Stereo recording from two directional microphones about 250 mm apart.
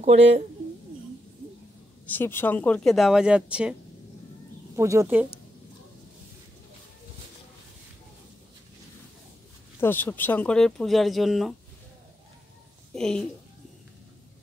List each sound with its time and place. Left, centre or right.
0.0 s speech: right
2.0 s speech: centre
4.7 s speech: centre
9.8 s speech: centre
12.9 s a woman's voice: centre